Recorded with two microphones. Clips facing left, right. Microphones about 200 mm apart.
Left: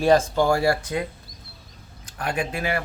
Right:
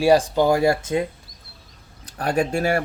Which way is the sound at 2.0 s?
35° right (ahead or behind).